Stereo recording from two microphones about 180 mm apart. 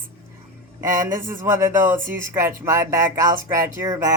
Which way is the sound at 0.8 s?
50° right (ahead or behind).